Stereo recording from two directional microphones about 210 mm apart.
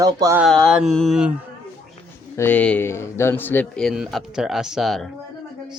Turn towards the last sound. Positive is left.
turn(degrees=0)  # may be behind; listen again after turning